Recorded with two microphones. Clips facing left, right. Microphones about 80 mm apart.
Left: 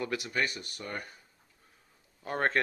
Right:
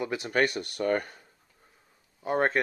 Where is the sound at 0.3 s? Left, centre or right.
Right.